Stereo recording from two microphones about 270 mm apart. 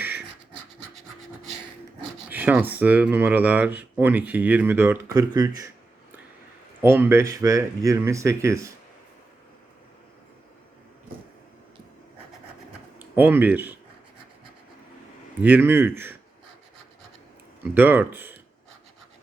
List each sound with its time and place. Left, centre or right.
2.3 s speech: centre
5.1 s a sound: centre
6.8 s speech: centre
13.0 s speech: centre
15.4 s speech: centre
17.6 s speech: centre